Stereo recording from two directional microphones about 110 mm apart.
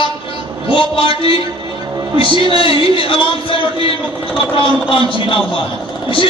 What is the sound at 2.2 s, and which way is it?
Music, 45° right (ahead or behind).